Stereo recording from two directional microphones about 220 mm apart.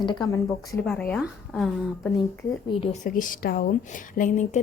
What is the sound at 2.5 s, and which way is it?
A woman's voice, 25° left (ahead or behind).